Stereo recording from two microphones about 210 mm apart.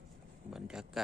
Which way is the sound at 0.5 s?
Centre (ahead or behind).